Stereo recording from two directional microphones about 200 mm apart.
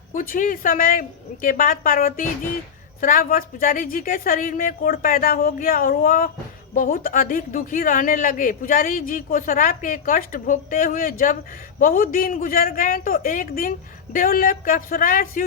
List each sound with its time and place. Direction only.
0.1 s a woman's voice: 40° left (ahead or behind)